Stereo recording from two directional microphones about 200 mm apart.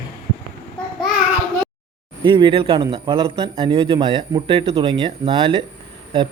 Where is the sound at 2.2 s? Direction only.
25° right (ahead or behind).